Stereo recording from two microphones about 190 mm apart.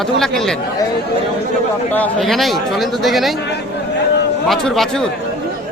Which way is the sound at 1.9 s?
5° left (ahead or behind).